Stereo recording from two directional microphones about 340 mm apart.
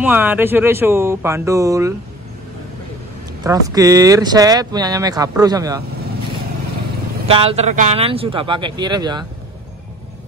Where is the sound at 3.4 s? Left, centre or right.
Centre.